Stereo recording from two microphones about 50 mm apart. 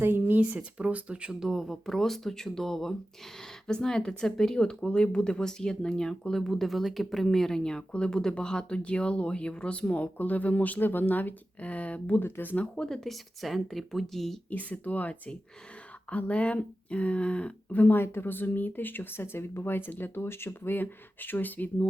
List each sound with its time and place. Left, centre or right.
0.0 s speech: right
1.3 s speech: centre; by 12.2 s left
12.7 s speech: centre
14.5 s speech: left
17.9 s speech: left